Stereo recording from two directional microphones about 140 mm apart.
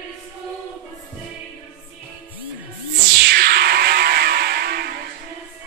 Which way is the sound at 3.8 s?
90° right.